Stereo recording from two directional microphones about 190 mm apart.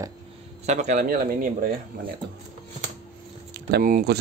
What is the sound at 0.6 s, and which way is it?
Speech, 40° right (ahead or behind).